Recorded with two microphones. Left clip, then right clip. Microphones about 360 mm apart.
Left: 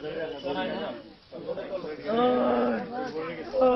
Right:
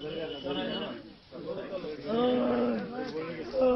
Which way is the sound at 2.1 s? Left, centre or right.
Left.